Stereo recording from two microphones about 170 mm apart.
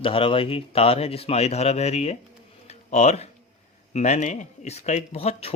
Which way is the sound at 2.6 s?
40° left (ahead or behind).